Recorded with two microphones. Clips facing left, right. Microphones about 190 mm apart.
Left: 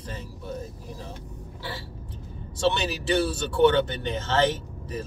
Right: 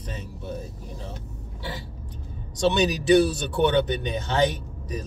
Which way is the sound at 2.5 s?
15° right (ahead or behind).